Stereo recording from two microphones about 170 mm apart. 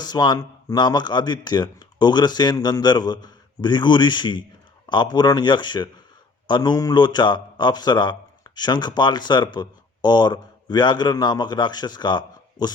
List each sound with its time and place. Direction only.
0.0 s a man's voice: 25° left (ahead or behind)